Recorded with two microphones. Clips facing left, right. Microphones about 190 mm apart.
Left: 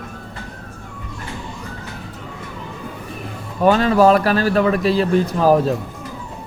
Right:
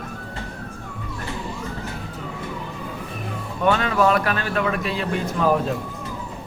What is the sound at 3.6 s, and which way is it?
Speech, 35° left (ahead or behind).